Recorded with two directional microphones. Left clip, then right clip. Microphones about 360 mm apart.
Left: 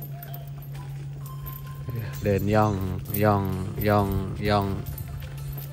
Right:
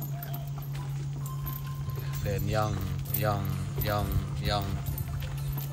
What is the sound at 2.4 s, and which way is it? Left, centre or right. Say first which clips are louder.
Speech: left 7 dB; centre.